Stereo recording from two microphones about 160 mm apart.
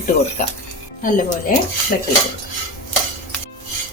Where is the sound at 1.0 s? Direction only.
55° left (ahead or behind).